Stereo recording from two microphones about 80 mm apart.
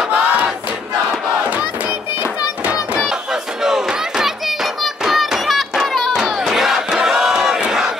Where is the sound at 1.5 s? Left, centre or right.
Centre.